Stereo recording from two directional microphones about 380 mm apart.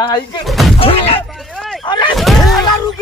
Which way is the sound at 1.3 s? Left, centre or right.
Centre.